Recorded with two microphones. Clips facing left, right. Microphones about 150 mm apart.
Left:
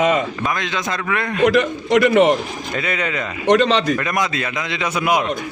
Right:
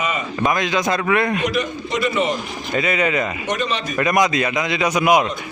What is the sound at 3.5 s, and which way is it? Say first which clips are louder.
Speech: left 14 dB; 90° left.